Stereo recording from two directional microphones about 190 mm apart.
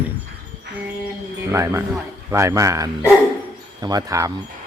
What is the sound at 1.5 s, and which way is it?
A man's voice, 15° right (ahead or behind).